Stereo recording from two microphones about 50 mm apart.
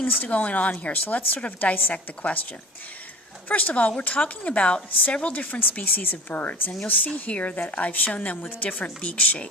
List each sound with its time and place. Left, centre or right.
0.1 s a woman's voice: left
3.5 s a woman's voice: left